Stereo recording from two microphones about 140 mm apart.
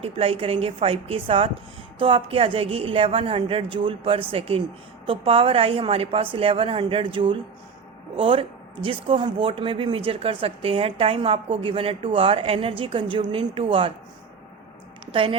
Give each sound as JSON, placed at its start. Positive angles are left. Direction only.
{"t": 0.0, "sound": "speech", "side_deg": -40}
{"t": 15.0, "sound": "a woman's voice", "side_deg": -40}